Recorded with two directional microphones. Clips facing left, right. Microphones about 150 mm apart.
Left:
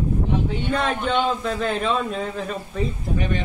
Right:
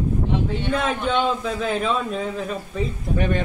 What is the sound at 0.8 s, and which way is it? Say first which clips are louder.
A man's voice: even; centre (ahead or behind).